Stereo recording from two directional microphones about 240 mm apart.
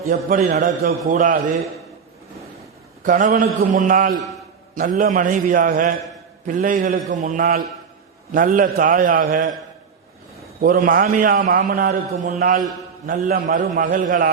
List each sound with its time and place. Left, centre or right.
0.1 s a man's voice: right
3.0 s a man's voice: right
10.6 s a man's voice: right